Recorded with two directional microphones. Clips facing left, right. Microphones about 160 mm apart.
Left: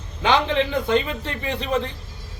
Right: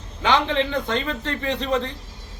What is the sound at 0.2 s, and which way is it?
A man's voice, 15° left (ahead or behind).